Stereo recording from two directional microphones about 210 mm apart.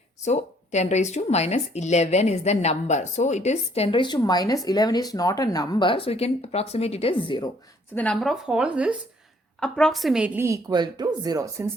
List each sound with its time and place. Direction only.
0.3 s speech: 35° left (ahead or behind)
7.9 s a woman's voice: 5° left (ahead or behind); by 11.6 s 15° right (ahead or behind)